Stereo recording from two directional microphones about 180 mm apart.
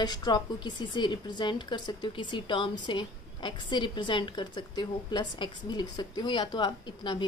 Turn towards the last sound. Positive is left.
turn(degrees=25)  # may be behind; listen again after turning